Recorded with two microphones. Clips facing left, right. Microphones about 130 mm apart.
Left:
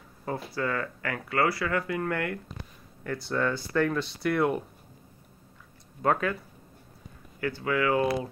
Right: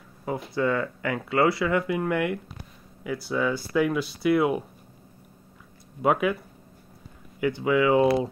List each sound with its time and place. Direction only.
0.2 s speech: 15° right (ahead or behind)
6.0 s speech: 10° right (ahead or behind)
7.3 s speech: 15° right (ahead or behind)